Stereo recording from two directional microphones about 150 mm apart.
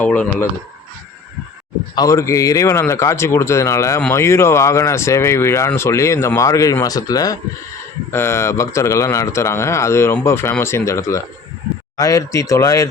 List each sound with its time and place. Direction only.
0.0 s speech: 10° left (ahead or behind)
2.0 s speech: 20° left (ahead or behind)